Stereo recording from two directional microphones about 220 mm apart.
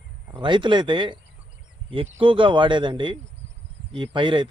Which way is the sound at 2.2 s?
25° right (ahead or behind).